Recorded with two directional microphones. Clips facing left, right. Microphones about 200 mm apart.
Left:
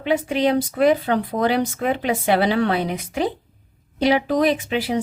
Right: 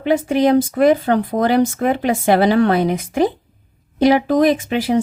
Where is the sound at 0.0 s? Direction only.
45° right (ahead or behind).